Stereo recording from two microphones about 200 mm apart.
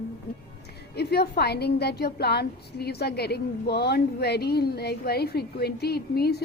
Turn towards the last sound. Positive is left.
turn(degrees=50)  # may be behind; listen again after turning